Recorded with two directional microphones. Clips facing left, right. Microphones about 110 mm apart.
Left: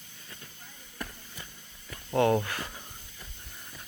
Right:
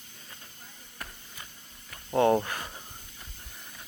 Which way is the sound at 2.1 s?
20° right (ahead or behind).